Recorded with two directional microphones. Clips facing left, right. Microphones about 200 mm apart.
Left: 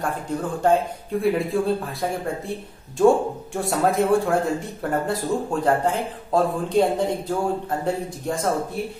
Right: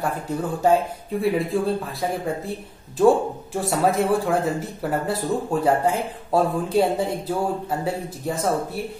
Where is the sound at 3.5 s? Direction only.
Centre (ahead or behind).